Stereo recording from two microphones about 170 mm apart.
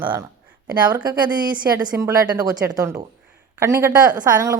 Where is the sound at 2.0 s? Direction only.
20° right (ahead or behind).